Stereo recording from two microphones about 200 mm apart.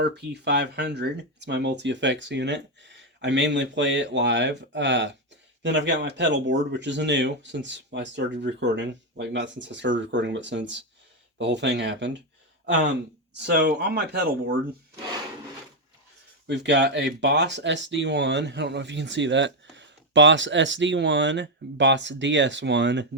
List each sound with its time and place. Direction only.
0.0 s speech: 55° right (ahead or behind)
16.5 s speech: 60° right (ahead or behind)